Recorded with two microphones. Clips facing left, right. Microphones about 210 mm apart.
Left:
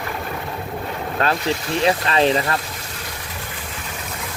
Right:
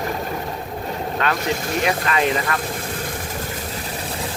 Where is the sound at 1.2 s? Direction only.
40° left (ahead or behind).